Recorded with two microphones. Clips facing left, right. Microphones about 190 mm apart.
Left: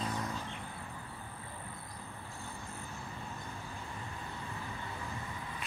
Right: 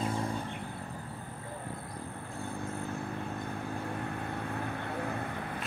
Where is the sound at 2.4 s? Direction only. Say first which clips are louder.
Right 11 dB; 55° right (ahead or behind).